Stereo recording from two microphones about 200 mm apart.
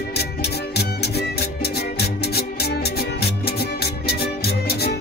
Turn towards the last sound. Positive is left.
turn(degrees=50)  # may be behind; listen again after turning